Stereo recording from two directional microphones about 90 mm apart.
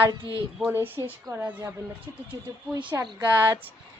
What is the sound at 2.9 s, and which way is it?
Speech, 35° right (ahead or behind).